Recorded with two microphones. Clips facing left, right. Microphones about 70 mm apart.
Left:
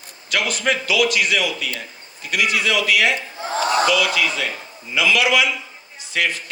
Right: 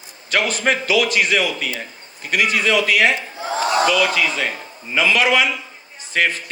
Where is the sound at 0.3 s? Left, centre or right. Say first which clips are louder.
Right 2 dB; right.